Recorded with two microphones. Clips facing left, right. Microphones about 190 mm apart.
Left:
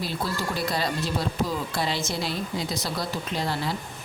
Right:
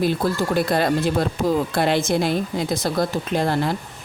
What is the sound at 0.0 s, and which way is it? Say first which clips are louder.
Speech: right 9 dB; 55° right (ahead or behind).